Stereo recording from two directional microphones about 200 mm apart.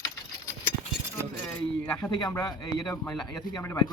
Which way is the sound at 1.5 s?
5° left (ahead or behind).